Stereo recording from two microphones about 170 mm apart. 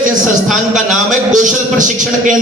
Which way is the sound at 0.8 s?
50° right (ahead or behind).